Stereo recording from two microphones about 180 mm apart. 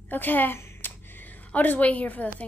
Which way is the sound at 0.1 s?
10° left (ahead or behind).